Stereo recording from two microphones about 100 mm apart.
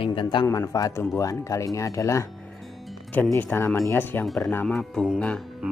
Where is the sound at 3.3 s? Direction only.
25° left (ahead or behind).